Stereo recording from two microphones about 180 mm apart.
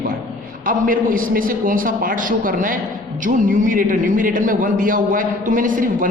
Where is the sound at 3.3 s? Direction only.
45° right (ahead or behind).